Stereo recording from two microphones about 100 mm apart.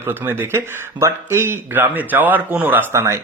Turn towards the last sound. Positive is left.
turn(degrees=-25)  # may be behind; listen again after turning